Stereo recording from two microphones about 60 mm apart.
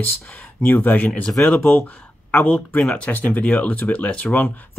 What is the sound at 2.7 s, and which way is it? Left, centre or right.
Speech, centre.